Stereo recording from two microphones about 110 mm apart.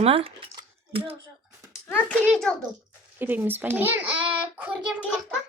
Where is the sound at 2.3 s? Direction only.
5° left (ahead or behind).